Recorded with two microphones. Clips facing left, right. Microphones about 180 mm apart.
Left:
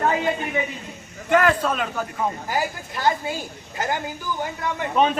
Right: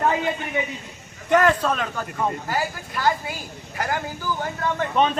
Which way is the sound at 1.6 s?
5° left (ahead or behind).